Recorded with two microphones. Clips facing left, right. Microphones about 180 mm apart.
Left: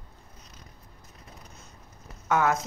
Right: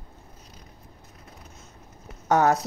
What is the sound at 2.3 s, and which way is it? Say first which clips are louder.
Speech: right 4 dB; 35° right (ahead or behind).